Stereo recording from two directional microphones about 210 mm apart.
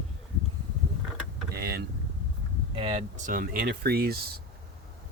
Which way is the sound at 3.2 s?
40° right (ahead or behind).